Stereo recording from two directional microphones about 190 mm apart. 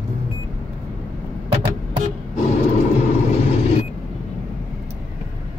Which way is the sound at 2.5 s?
35° left (ahead or behind).